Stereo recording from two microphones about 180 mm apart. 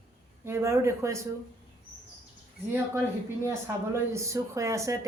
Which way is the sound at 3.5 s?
15° right (ahead or behind).